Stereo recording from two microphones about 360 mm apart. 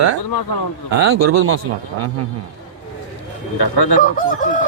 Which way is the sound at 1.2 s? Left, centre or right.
Right.